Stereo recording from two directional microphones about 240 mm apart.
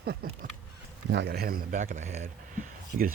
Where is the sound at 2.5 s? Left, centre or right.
Right.